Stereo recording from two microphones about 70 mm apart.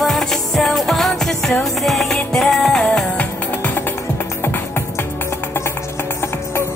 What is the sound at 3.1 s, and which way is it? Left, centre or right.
Music, left.